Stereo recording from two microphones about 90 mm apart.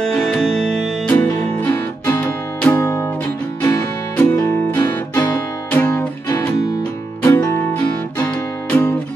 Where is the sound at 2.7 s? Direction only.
35° left (ahead or behind).